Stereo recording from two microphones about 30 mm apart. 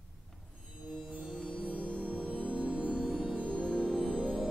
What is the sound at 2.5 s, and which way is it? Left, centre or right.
Music, right.